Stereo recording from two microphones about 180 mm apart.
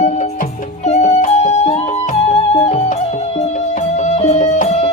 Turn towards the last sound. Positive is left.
turn(degrees=35)  # may be behind; listen again after turning